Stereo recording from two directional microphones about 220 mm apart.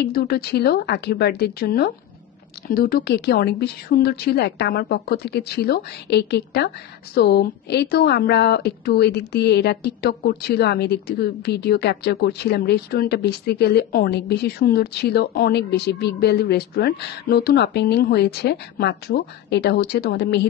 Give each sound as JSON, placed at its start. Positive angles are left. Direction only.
{"t": 0.0, "sound": "a woman's voice", "side_deg": 45}